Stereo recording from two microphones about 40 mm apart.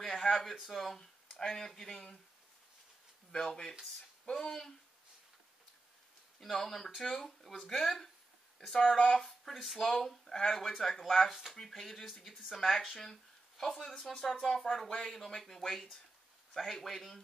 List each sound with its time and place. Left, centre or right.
0.0 s speech: centre
3.3 s speech: centre
6.4 s speech: centre
11.5 s speech: centre